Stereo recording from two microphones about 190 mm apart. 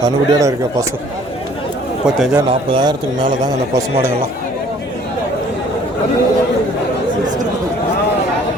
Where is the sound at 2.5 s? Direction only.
25° right (ahead or behind).